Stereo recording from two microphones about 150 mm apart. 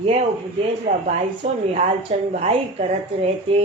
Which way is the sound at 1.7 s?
50° right (ahead or behind).